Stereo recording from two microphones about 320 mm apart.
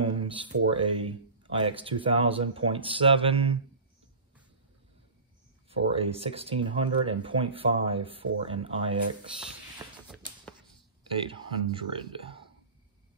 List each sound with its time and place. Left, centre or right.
0.0 s speech: centre
5.7 s speech: centre
11.2 s speech: centre